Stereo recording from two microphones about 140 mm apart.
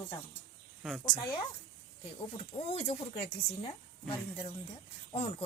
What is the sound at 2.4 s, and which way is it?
Speech, 45° left (ahead or behind).